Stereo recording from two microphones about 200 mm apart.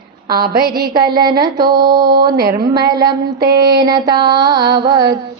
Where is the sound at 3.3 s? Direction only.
50° right (ahead or behind).